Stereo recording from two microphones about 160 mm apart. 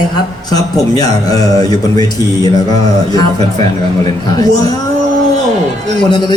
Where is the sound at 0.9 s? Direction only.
25° left (ahead or behind).